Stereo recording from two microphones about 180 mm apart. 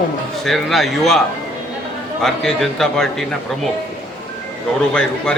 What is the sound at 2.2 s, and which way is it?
A man's voice, centre (ahead or behind).